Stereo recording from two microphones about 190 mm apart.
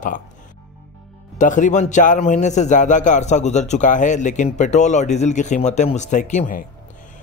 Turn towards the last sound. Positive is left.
turn(degrees=40)  # may be behind; listen again after turning